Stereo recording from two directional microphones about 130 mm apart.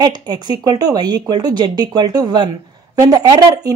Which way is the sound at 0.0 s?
30° right (ahead or behind).